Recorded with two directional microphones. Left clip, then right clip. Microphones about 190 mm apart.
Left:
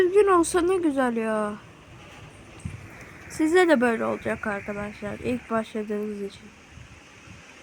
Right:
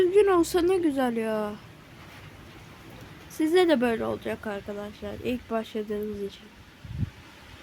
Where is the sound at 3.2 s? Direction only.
15° left (ahead or behind).